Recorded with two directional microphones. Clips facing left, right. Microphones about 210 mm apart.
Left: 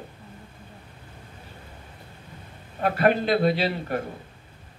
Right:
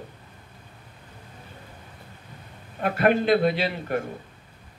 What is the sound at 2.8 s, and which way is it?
Speech, 50° right (ahead or behind).